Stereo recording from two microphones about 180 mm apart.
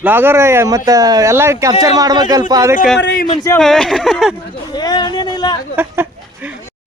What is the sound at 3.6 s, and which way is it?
Speech, 5° left (ahead or behind).